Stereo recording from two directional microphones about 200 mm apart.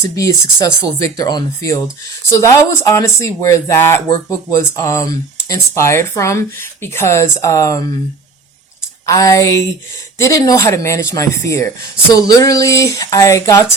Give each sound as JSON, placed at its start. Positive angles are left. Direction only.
{"t": 0.0, "sound": "speech", "side_deg": 15}
{"t": 9.0, "sound": "speech", "side_deg": 15}